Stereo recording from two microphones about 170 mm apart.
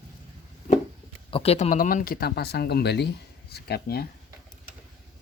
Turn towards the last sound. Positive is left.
turn(degrees=70)  # may be behind; listen again after turning